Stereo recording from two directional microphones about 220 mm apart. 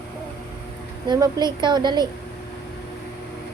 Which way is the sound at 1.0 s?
20° right (ahead or behind).